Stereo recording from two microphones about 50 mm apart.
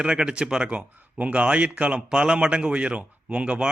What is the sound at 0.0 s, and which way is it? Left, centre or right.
Speech, centre.